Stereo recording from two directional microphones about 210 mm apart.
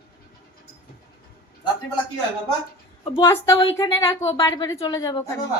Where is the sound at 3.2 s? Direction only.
15° left (ahead or behind).